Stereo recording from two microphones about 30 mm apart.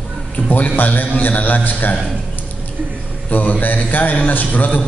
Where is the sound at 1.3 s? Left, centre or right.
Left.